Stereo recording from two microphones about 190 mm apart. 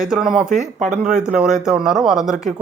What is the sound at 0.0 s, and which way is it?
Speech, 5° right (ahead or behind).